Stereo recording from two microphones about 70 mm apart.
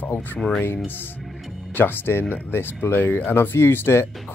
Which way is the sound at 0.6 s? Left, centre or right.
Left.